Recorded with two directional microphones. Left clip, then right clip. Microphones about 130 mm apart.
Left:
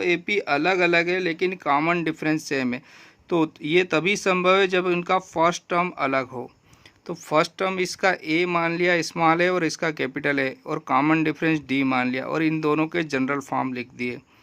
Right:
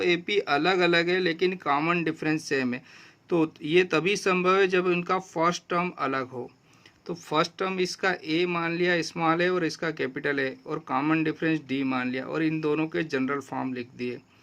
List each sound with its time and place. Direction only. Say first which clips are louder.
0.0 s speech: left 2 dB; 25° left (ahead or behind); by 14.2 s 45° left (ahead or behind)